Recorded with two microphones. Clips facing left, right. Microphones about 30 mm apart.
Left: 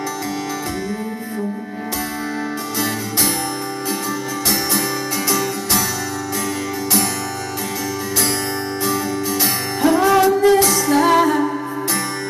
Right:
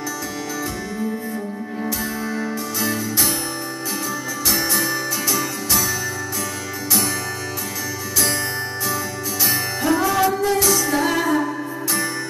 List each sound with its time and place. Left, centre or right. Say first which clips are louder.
5.3 s music: left 4 dB; left
9.4 s music: left 1 dB; left
10.9 s music: left 5 dB; left